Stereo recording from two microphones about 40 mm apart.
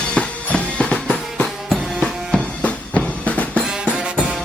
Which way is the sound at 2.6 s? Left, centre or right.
Left.